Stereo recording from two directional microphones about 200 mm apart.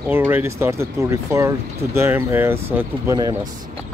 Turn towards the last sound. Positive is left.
turn(degrees=-15)  # may be behind; listen again after turning